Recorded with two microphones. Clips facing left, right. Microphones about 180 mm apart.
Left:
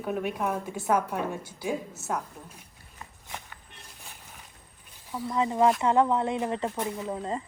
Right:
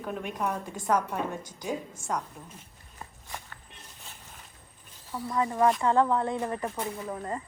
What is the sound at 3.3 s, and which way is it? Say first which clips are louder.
Walk: left 1 dB; 15° left (ahead or behind).